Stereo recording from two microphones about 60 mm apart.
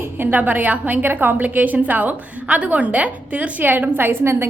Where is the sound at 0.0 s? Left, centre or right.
Right.